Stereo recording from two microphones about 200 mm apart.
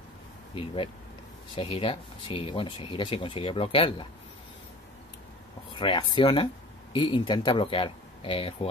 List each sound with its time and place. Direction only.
1.5 s speech: 25° left (ahead or behind)
5.8 s speech: 25° left (ahead or behind)